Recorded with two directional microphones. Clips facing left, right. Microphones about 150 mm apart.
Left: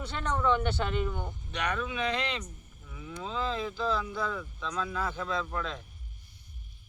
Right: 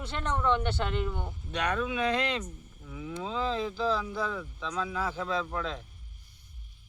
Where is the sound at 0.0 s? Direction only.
Centre (ahead or behind).